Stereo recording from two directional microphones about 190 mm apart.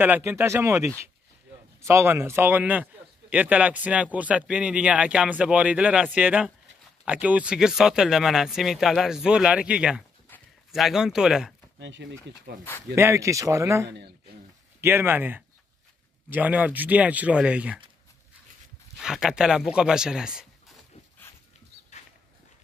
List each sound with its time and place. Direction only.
0.0 s speech: 10° right (ahead or behind)
11.8 s speech: 70° right (ahead or behind)
12.9 s speech: 15° right (ahead or behind)
13.8 s a man's voice: 60° right (ahead or behind)
14.8 s speech: 10° right (ahead or behind)
18.9 s speech: 5° right (ahead or behind)